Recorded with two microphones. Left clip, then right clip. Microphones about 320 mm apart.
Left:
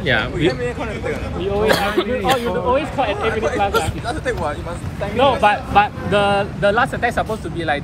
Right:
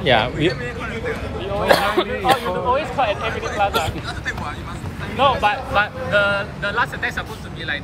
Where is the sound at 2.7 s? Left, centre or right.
Centre.